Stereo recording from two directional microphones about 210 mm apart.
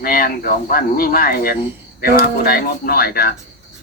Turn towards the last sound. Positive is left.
turn(degrees=45)  # may be behind; listen again after turning